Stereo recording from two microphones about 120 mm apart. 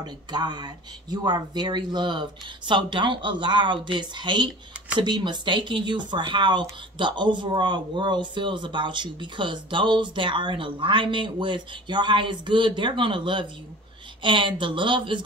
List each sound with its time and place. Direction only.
0.0 s speech: 35° right (ahead or behind)